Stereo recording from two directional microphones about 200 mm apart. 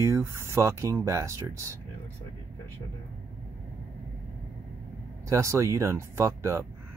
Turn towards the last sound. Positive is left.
turn(degrees=-15)  # may be behind; listen again after turning